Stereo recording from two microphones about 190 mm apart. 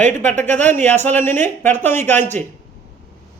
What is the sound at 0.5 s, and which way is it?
A man's voice, 10° left (ahead or behind).